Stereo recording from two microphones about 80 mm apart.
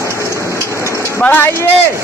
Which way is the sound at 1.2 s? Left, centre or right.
Left.